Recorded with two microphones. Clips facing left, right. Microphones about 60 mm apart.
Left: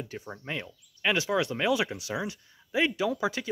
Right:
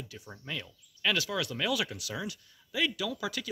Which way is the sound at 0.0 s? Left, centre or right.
Left.